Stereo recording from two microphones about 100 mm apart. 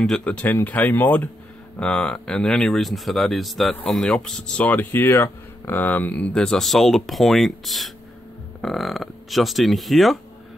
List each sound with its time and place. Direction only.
0.0 s speech: 10° left (ahead or behind)